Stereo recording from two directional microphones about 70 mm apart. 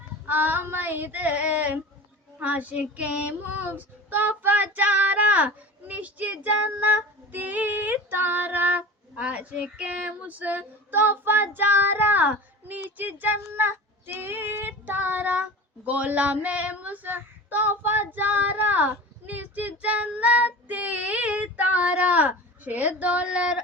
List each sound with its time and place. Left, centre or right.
0.3 s child singing: right